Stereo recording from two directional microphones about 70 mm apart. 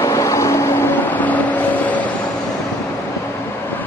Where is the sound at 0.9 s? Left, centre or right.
Left.